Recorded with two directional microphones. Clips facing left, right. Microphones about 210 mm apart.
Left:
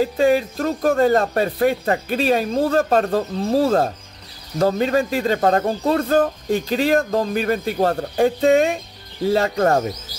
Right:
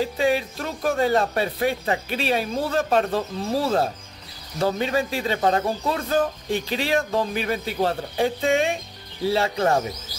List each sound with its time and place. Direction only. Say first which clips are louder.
0.0 s speech: left 5 dB; 45° left (ahead or behind)